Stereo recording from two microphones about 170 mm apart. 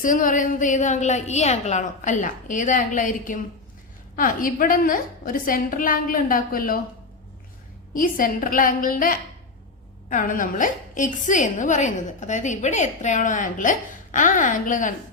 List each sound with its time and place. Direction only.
0.0 s a woman's voice: 50° left (ahead or behind)
7.9 s a woman's voice: 55° left (ahead or behind)